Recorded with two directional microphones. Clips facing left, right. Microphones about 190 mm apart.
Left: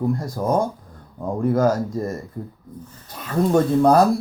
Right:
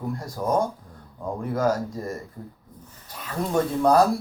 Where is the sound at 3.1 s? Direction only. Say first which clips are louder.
Left 6 dB; 45° left (ahead or behind).